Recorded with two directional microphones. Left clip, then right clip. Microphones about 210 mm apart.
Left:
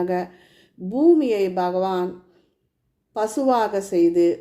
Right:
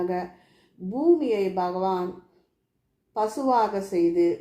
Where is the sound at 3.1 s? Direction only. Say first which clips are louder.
Left 3 dB; 40° left (ahead or behind).